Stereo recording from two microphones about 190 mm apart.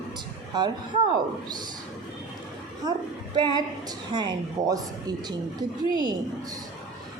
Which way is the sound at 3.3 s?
25° right (ahead or behind).